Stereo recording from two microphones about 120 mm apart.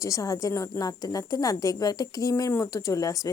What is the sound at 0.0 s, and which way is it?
A woman's voice, 30° left (ahead or behind).